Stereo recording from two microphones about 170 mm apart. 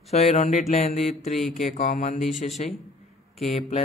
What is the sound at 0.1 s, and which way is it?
Speech, 40° left (ahead or behind).